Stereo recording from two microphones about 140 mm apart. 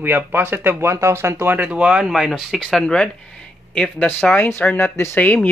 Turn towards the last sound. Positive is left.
turn(degrees=10)  # may be behind; listen again after turning